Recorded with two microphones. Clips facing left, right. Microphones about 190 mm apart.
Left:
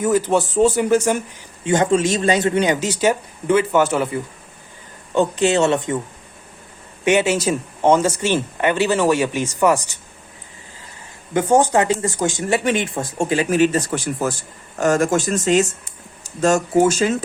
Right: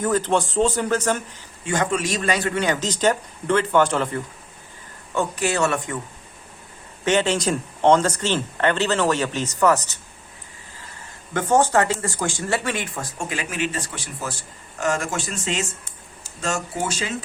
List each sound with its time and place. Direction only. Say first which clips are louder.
0.0 s speech: left 4 dB; 10° left (ahead or behind)
1.6 s speech: left 7 dB; 20° left (ahead or behind)
5.1 s speech: left 6 dB; 20° left (ahead or behind)
7.0 s speech: left 3 dB; 10° left (ahead or behind)
11.3 s speech: left 3 dB; 15° left (ahead or behind); by 17.2 s 45° left (ahead or behind)